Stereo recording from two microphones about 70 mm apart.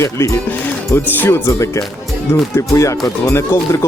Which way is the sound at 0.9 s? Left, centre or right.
Left.